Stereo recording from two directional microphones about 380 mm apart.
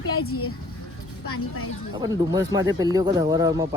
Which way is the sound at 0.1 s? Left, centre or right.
Left.